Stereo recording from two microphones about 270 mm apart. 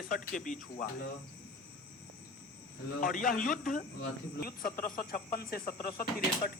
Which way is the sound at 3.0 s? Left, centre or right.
Left.